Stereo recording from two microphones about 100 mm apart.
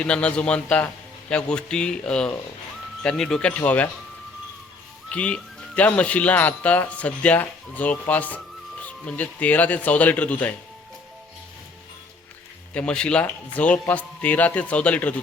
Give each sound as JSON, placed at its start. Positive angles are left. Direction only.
{"t": 0.0, "sound": "speech", "side_deg": 10}
{"t": 5.0, "sound": "speech", "side_deg": 10}
{"t": 12.7, "sound": "speech", "side_deg": 10}